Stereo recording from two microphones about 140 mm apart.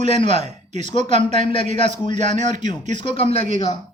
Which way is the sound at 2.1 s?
55° right (ahead or behind).